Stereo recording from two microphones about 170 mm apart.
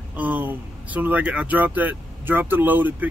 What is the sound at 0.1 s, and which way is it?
Speech, 10° right (ahead or behind).